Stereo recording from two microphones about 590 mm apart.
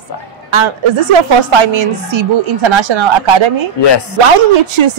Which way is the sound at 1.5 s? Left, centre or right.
Right.